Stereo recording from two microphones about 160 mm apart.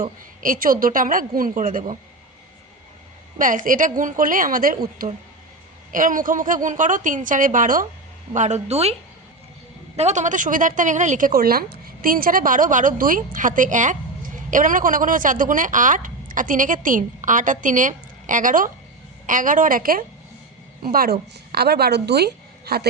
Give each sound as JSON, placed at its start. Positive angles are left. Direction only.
{"t": 0.0, "sound": "a woman's voice", "side_deg": -60}
{"t": 3.3, "sound": "a woman's voice", "side_deg": -55}